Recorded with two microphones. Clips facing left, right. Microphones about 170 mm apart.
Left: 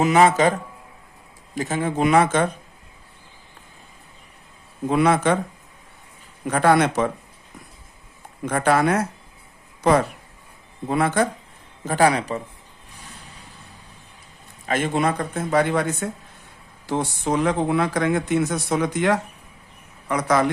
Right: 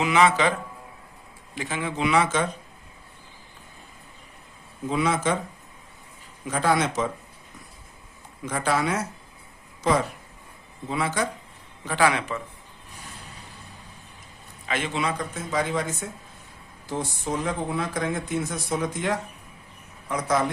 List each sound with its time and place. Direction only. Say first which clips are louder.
0.0 s speech: left 4 dB; 45° left (ahead or behind)
4.9 s speech: left 6 dB; 60° left (ahead or behind)
6.4 s speech: left 6 dB; 60° left (ahead or behind)
8.4 s speech: left 6 dB; 55° left (ahead or behind)
10.8 s speech: left 6 dB; 55° left (ahead or behind)
11.9 s a man's voice: left 4 dB; 40° left (ahead or behind)
14.7 s speech: left 6 dB; 50° left (ahead or behind)
16.8 s speech: left 6 dB; 75° left (ahead or behind)